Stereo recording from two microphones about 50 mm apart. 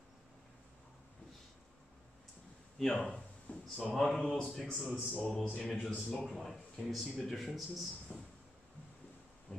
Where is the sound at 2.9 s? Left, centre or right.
Left.